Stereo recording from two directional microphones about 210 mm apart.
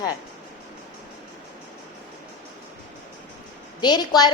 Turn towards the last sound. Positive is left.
turn(degrees=20)  # may be behind; listen again after turning